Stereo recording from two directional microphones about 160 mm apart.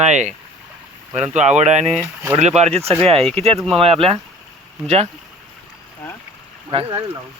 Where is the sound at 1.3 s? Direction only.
45° right (ahead or behind).